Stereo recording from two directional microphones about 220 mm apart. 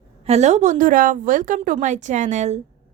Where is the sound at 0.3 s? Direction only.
30° right (ahead or behind).